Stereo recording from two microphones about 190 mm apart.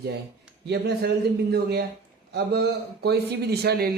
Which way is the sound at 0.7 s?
60° right (ahead or behind).